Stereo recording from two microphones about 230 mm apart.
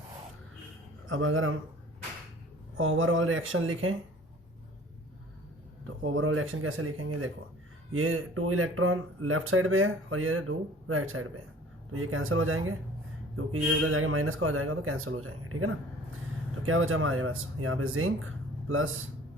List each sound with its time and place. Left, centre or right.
1.0 s speech: right
2.7 s speech: right
5.8 s speech: right